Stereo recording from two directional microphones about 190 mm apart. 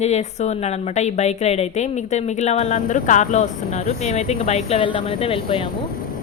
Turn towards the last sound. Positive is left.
turn(degrees=30)  # may be behind; listen again after turning